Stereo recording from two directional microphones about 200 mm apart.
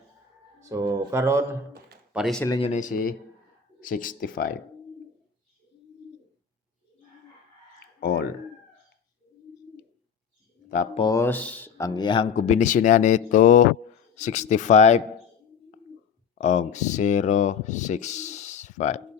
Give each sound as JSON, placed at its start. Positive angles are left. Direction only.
{"t": 0.6, "sound": "speech", "side_deg": -15}
{"t": 2.1, "sound": "speech", "side_deg": 0}
{"t": 2.6, "sound": "speech", "side_deg": 35}
{"t": 8.0, "sound": "a sound", "side_deg": 55}
{"t": 10.9, "sound": "speech", "side_deg": 25}
{"t": 11.2, "sound": "speech", "side_deg": 10}
{"t": 11.9, "sound": "speech", "side_deg": 25}
{"t": 12.3, "sound": "speech", "side_deg": 35}
{"t": 16.4, "sound": "speech", "side_deg": 35}